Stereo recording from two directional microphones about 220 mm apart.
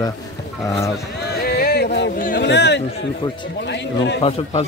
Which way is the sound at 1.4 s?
45° left (ahead or behind).